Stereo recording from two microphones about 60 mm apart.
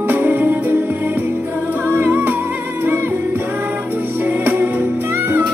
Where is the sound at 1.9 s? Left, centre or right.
Right.